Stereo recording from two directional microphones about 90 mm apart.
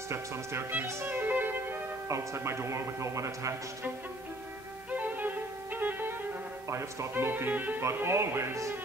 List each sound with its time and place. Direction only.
0.1 s a man's voice: 25° right (ahead or behind)
4.9 s music: 20° right (ahead or behind)
6.7 s speech: 30° right (ahead or behind)